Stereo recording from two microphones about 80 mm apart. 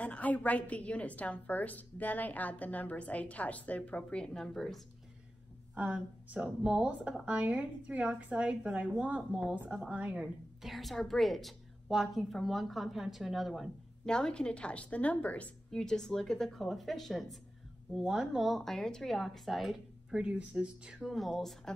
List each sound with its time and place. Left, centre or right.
0.0 s a woman's voice: centre
5.8 s a woman's voice: right; by 13.7 s centre
14.0 s a woman's voice: centre
20.2 s a woman's voice: centre
21.0 s a woman's voice: centre